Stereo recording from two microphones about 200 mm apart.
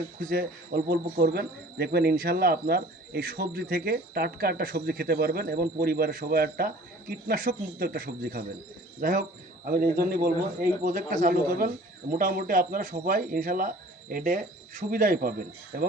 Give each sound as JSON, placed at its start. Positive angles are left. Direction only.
{"t": 0.2, "sound": "speech", "side_deg": -45}